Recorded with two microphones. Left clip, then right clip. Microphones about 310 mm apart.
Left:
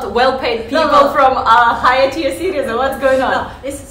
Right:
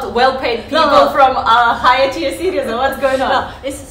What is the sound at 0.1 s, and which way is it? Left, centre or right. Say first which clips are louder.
A woman's voice: even; centre.